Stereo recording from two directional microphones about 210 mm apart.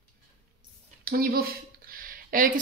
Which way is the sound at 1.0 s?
45° right (ahead or behind).